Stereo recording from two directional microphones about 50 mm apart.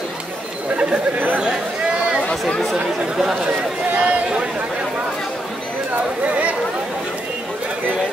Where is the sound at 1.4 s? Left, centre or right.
Centre.